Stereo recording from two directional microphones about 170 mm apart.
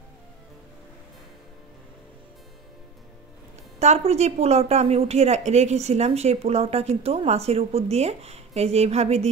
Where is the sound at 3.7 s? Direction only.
40° right (ahead or behind).